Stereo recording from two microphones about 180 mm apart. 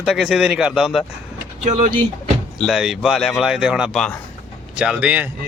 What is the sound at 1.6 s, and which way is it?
Speech, 40° right (ahead or behind).